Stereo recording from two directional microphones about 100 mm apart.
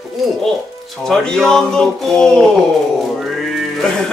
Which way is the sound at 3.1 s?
Centre (ahead or behind).